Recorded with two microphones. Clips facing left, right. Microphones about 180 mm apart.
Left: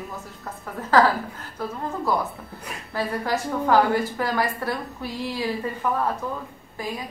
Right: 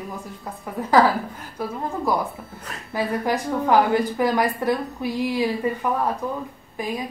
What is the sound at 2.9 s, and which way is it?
A woman's voice, 15° right (ahead or behind).